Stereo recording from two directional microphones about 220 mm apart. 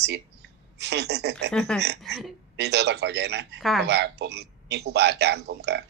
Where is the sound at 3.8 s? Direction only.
50° right (ahead or behind).